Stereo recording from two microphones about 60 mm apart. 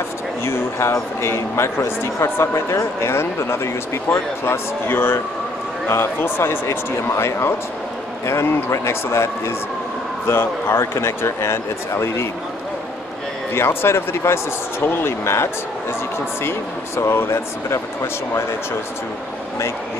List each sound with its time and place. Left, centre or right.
0.5 s speech: left
13.6 s speech: left
14.8 s speech: left